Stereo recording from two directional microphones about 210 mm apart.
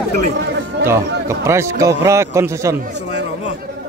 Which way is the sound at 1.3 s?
15° right (ahead or behind).